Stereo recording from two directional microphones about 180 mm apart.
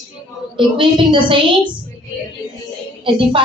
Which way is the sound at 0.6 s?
30° right (ahead or behind).